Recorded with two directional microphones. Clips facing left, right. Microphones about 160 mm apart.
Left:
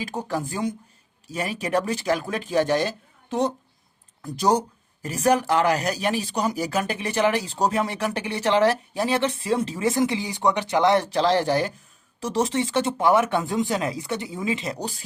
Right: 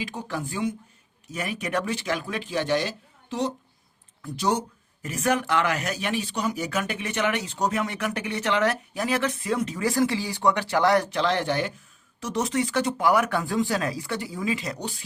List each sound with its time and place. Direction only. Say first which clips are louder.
0.0 s speech: left 4 dB; 40° left (ahead or behind)
4.2 s speech: left 4 dB; 35° left (ahead or behind)